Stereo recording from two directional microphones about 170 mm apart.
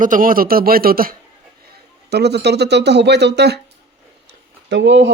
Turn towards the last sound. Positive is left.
turn(degrees=-90)